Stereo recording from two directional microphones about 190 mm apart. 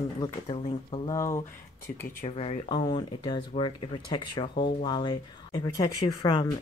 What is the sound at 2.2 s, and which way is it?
Speech, 30° left (ahead or behind).